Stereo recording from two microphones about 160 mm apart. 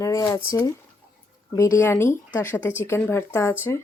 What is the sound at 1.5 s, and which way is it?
Speech, 20° left (ahead or behind).